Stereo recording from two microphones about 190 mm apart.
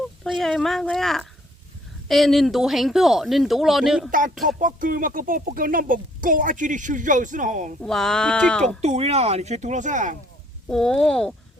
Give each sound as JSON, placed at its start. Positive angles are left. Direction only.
{"t": 0.3, "sound": "speech", "side_deg": 0}
{"t": 4.4, "sound": "speech", "side_deg": -45}
{"t": 7.8, "sound": "speech", "side_deg": 0}
{"t": 8.8, "sound": "speech", "side_deg": -35}
{"t": 10.7, "sound": "speech", "side_deg": 0}